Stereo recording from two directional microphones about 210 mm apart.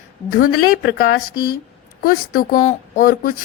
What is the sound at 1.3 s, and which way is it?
A woman's voice, 45° left (ahead or behind).